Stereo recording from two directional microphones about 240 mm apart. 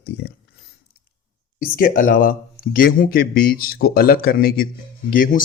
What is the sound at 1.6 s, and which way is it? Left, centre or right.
Speech, left.